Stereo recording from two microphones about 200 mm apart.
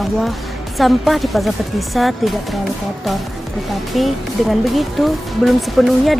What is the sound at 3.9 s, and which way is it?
Speech, centre (ahead or behind).